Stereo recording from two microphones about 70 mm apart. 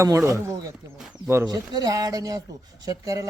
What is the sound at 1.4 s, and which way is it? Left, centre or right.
A man's voice, right.